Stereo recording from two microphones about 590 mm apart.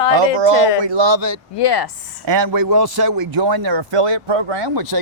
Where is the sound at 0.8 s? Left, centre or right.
Right.